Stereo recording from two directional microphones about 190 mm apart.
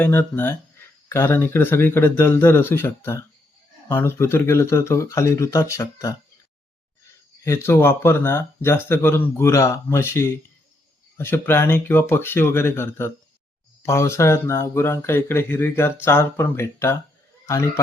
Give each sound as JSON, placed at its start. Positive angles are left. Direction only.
{"t": 0.0, "sound": "speech", "side_deg": 10}
{"t": 7.4, "sound": "speech", "side_deg": 15}
{"t": 17.4, "sound": "chuckle", "side_deg": 15}